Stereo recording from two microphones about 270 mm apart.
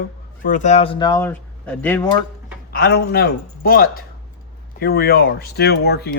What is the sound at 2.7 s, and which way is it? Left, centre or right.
Speech, left.